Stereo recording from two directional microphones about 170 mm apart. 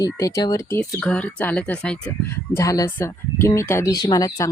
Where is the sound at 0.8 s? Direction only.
5° left (ahead or behind).